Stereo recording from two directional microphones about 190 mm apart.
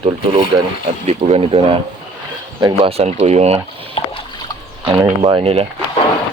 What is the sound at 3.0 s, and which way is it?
Speech, 35° right (ahead or behind).